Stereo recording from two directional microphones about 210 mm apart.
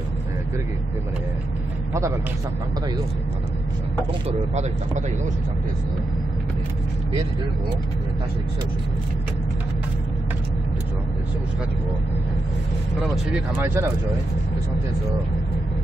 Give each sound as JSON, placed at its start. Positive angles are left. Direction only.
{"t": 4.3, "sound": "speech", "side_deg": -35}
{"t": 13.3, "sound": "speech", "side_deg": -10}